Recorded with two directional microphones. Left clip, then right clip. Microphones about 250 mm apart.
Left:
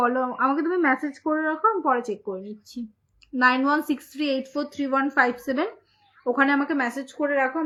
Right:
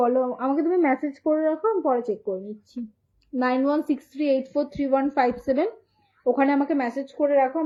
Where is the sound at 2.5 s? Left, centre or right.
Centre.